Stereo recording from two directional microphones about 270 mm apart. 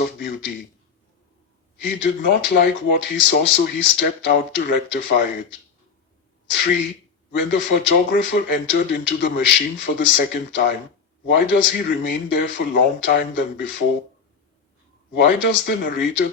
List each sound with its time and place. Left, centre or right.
0.0 s speech: left
1.8 s speech: left
7.3 s a man's voice: left
15.1 s speech: left